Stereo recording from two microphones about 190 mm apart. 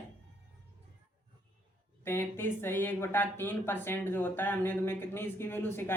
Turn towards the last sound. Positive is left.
turn(degrees=10)  # may be behind; listen again after turning